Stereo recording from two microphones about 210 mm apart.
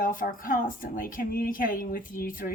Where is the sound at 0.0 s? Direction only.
40° left (ahead or behind).